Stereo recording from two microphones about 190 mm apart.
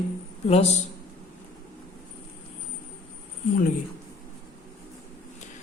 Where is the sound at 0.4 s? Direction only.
30° left (ahead or behind).